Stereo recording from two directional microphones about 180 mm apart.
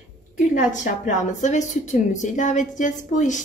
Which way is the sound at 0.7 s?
45° left (ahead or behind).